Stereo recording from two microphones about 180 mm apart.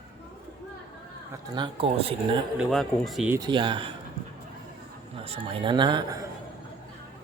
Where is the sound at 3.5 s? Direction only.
25° right (ahead or behind).